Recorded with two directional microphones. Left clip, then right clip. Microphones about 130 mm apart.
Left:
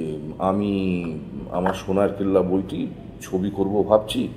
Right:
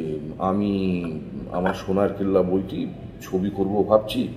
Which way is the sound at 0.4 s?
30° left (ahead or behind).